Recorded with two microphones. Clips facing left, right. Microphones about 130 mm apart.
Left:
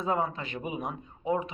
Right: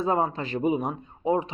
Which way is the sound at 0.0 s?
35° right (ahead or behind).